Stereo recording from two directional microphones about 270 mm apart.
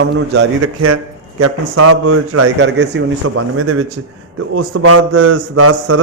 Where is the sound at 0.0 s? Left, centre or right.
Right.